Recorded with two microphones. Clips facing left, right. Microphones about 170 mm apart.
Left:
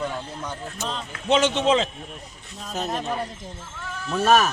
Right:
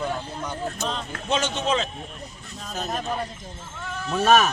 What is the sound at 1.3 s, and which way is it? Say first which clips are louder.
Speech: left 5 dB; 25° left (ahead or behind).